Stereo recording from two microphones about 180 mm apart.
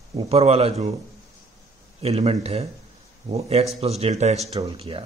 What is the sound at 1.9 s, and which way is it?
Speech, 35° right (ahead or behind).